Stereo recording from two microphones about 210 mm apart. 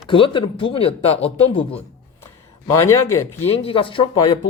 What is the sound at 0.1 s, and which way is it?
Speech, 25° left (ahead or behind).